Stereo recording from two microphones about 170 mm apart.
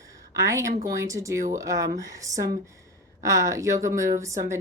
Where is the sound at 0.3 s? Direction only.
20° right (ahead or behind).